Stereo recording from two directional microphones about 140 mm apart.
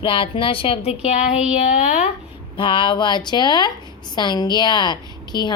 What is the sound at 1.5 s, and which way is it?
Speech, 55° left (ahead or behind).